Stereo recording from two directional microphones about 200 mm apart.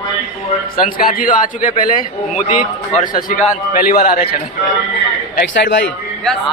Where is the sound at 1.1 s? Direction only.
45° left (ahead or behind).